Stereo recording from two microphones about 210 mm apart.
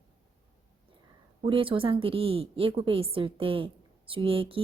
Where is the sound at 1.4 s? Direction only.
25° right (ahead or behind).